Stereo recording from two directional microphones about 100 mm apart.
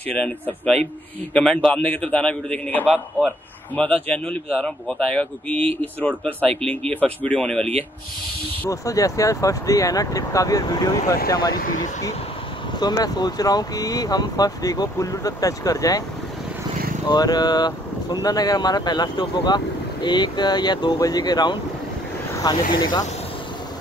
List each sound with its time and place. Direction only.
0.1 s speech: 10° left (ahead or behind)
8.6 s speech: 35° left (ahead or behind)
12.7 s speech: 45° left (ahead or behind)
17.1 s speech: 45° left (ahead or behind)